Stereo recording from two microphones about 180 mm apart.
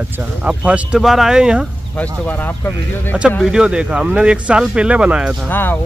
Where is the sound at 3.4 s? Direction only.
5° right (ahead or behind).